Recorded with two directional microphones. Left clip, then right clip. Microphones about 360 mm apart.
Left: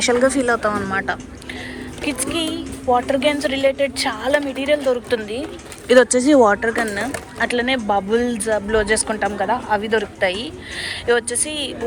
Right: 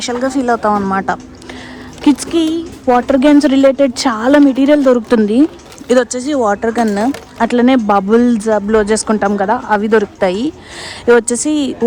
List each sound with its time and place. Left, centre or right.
0.0 s speech: centre
0.3 s speech: centre
2.0 s speech: right
6.1 s speech: centre
7.4 s speech: right